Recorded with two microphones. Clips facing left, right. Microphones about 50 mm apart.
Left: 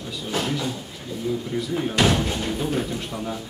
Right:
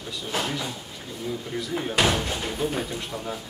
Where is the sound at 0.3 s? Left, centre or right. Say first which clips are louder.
Left 3 dB; centre.